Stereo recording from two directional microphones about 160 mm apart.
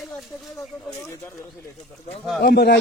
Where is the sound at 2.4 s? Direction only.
90° left.